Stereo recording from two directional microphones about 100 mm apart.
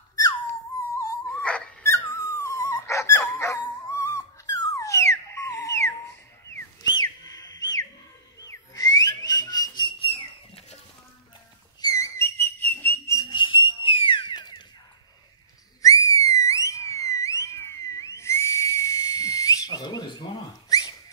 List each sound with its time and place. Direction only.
0.1 s a sound: 35° left (ahead or behind)
1.3 s dog: 10° left (ahead or behind)
1.8 s dog: 25° left (ahead or behind)
4.1 s a sound: 35° left (ahead or behind)
6.8 s a sound: 45° left (ahead or behind)
8.5 s whistle: 40° left (ahead or behind); by 10.8 s 70° left (ahead or behind)
11.8 s whistle: 30° left (ahead or behind)
13.3 s whistle: 55° left (ahead or behind)
15.8 s whistle: 35° left (ahead or behind)